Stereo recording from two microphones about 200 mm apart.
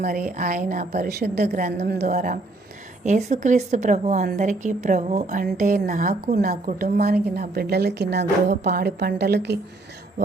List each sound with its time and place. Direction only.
0.0 s a woman's voice: 45° right (ahead or behind)
2.0 s a woman's voice: 40° right (ahead or behind); by 9.6 s 55° right (ahead or behind)